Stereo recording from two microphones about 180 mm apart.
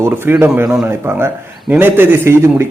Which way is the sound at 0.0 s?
10° right (ahead or behind).